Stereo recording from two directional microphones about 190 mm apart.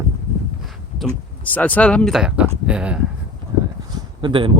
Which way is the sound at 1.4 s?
10° left (ahead or behind).